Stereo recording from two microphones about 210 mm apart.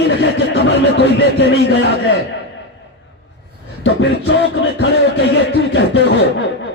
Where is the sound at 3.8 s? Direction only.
60° left (ahead or behind).